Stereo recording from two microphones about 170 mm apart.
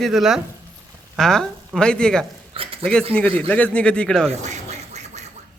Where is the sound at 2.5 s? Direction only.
35° right (ahead or behind).